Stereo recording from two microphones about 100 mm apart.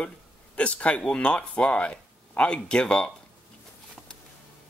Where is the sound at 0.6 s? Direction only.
10° left (ahead or behind).